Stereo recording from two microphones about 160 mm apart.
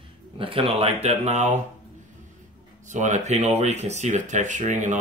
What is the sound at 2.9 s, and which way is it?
Speech, 50° right (ahead or behind).